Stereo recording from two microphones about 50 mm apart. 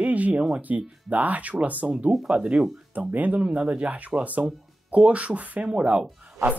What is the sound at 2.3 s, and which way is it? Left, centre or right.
Speech, centre.